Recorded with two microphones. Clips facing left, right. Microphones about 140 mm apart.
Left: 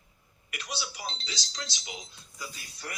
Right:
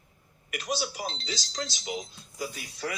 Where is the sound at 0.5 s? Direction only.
45° right (ahead or behind).